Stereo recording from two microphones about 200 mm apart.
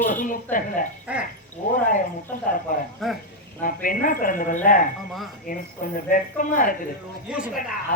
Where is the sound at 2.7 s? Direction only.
40° left (ahead or behind).